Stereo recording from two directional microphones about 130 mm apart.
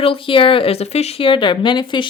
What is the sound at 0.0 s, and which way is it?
Speech, 45° left (ahead or behind).